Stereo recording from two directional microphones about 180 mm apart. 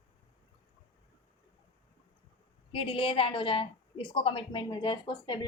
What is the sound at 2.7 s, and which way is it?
A woman's voice, 30° left (ahead or behind).